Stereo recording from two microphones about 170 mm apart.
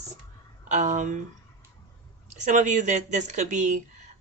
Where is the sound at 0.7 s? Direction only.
45° right (ahead or behind).